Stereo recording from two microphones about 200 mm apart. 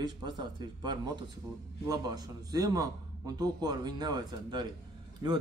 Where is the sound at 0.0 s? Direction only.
20° right (ahead or behind).